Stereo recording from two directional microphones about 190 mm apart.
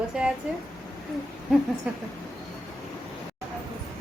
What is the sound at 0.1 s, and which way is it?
Speech, 5° right (ahead or behind).